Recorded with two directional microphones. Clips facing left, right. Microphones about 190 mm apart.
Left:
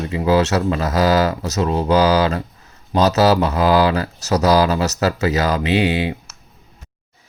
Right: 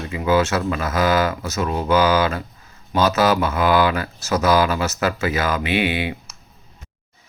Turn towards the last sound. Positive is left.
turn(degrees=40)  # may be behind; listen again after turning